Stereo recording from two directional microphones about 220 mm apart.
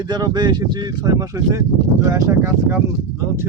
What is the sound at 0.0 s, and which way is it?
Speech, 20° right (ahead or behind).